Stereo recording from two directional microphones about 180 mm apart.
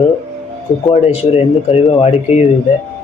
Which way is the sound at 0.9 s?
35° left (ahead or behind).